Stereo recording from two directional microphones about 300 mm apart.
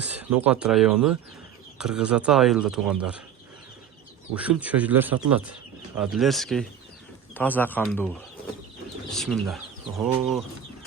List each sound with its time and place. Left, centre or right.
0.0 s a sound: centre
0.3 s speech: centre
4.4 s speech: centre